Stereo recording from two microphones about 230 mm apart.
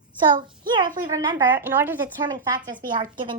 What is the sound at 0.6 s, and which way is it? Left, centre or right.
A woman's voice, centre.